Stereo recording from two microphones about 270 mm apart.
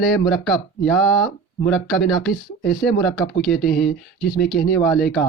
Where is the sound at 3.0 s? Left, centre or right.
Centre.